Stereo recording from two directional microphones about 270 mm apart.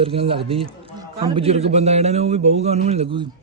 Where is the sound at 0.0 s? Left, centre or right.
Right.